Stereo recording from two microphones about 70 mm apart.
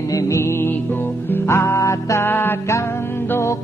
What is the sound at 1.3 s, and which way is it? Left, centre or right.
Music, left.